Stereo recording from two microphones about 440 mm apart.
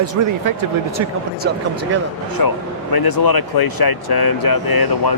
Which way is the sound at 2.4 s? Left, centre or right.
Left.